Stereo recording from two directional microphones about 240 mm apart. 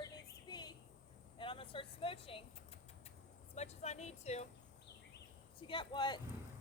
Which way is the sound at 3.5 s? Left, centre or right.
Left.